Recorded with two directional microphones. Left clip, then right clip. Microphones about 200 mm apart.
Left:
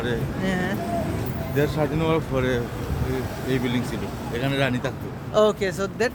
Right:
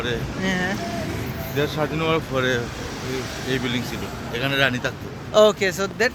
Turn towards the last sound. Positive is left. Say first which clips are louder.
# right 3 dB
turn(degrees=-15)  # may be behind; listen again after turning